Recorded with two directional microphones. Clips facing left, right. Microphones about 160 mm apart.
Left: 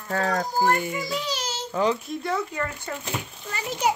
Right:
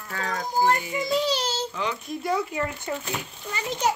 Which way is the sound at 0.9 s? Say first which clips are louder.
Right 5 dB; 25° right (ahead or behind).